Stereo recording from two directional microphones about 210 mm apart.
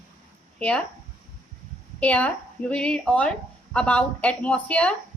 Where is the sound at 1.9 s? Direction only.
5° left (ahead or behind).